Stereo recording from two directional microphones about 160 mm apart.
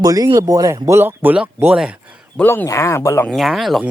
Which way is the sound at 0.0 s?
20° right (ahead or behind).